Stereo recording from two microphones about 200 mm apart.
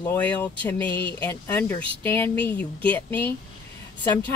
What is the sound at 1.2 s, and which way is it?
A woman's voice, 10° left (ahead or behind).